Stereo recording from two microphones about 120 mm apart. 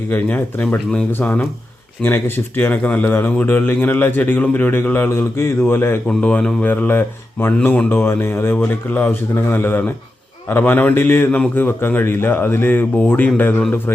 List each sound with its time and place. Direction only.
0.1 s speech: 15° left (ahead or behind)